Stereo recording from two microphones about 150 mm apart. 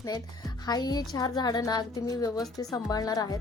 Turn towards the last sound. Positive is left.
turn(degrees=25)  # may be behind; listen again after turning